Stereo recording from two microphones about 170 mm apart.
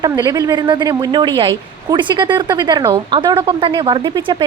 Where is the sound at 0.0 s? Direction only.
20° right (ahead or behind).